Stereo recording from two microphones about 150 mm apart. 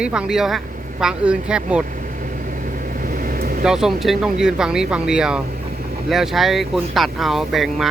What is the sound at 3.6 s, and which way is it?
Speech, 5° right (ahead or behind).